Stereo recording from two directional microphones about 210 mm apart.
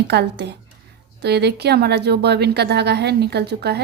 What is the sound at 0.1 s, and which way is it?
A woman's voice, 55° right (ahead or behind).